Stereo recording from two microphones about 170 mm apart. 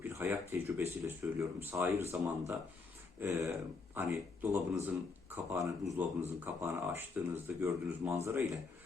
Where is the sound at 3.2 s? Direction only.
15° right (ahead or behind).